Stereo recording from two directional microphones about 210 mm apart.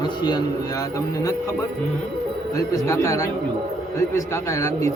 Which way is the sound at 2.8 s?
15° left (ahead or behind).